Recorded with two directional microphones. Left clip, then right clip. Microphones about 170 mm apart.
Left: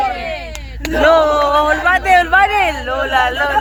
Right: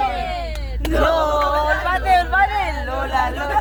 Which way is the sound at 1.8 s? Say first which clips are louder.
Left 6 dB; 35° left (ahead or behind).